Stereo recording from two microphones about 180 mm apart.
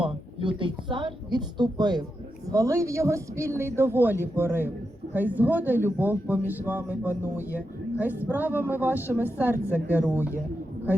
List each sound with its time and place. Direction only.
0.0 s a man's voice: 30° right (ahead or behind); by 10.3 s 10° right (ahead or behind)